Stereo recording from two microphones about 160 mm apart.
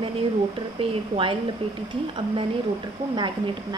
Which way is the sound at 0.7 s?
35° right (ahead or behind).